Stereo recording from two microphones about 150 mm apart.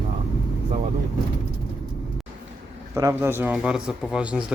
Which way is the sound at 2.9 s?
20° right (ahead or behind).